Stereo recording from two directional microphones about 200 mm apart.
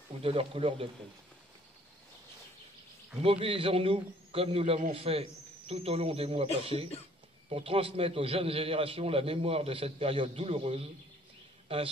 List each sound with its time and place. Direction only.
0.2 s a man's voice: 25° right (ahead or behind)
3.2 s a man's voice: 30° right (ahead or behind)